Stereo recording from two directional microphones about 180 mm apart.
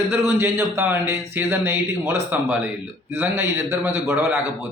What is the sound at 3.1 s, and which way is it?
Speech, 15° right (ahead or behind).